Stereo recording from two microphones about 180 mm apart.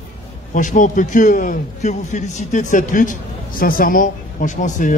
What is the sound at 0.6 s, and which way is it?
A man's voice, 45° left (ahead or behind).